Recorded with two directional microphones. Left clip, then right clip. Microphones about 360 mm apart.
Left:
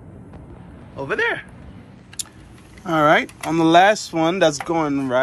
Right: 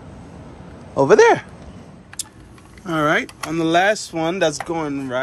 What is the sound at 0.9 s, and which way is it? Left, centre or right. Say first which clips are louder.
Speech: right 10 dB; centre.